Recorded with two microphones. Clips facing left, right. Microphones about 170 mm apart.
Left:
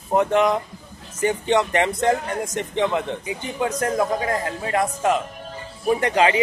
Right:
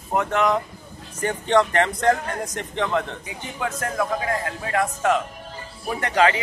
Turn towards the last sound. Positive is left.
turn(degrees=15)  # may be behind; listen again after turning